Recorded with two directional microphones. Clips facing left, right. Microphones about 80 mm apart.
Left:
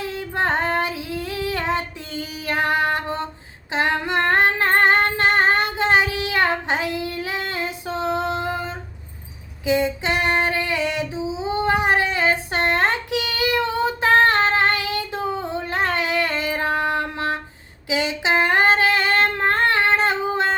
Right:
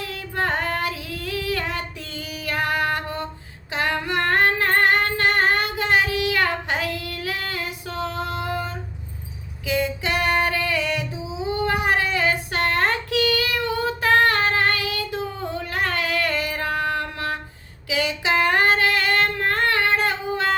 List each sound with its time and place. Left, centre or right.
0.0 s female singing: left
11.5 s a sound: left
17.8 s female singing: left